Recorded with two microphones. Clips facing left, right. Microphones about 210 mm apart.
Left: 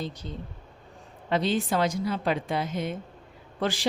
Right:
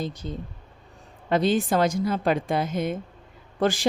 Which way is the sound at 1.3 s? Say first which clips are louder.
Right 4 dB; 45° right (ahead or behind).